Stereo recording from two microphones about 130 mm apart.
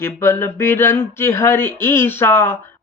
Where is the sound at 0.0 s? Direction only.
20° left (ahead or behind).